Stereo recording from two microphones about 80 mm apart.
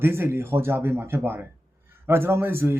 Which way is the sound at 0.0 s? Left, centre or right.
Right.